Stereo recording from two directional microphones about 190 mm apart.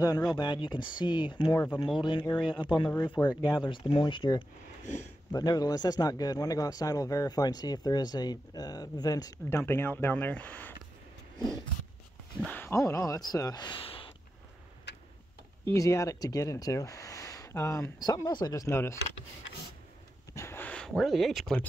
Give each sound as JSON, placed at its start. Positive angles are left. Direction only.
{"t": 0.0, "sound": "speech", "side_deg": 20}
{"t": 12.4, "sound": "speech", "side_deg": 10}
{"t": 14.9, "sound": "tick-tock", "side_deg": 65}
{"t": 15.6, "sound": "speech", "side_deg": 15}
{"t": 20.3, "sound": "a sound", "side_deg": 10}